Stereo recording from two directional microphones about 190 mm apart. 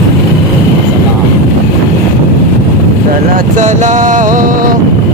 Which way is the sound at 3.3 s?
40° right (ahead or behind).